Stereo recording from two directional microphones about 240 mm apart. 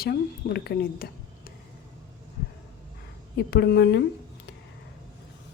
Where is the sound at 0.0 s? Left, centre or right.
Left.